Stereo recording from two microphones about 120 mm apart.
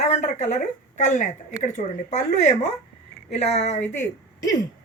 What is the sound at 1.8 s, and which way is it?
Speech, 75° left (ahead or behind).